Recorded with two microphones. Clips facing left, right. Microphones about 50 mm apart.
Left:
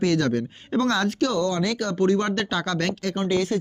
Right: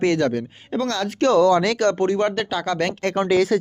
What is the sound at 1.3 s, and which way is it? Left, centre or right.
Speech, right.